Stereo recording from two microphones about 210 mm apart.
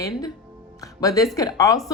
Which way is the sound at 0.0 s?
15° left (ahead or behind).